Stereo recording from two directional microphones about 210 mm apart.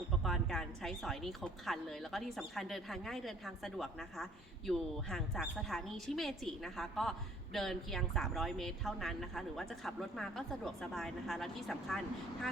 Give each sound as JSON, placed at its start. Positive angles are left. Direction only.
{"t": 0.2, "sound": "a woman's voice", "side_deg": 5}